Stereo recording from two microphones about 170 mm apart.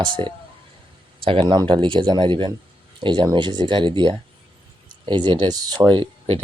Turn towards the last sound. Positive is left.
turn(degrees=-35)  # may be behind; listen again after turning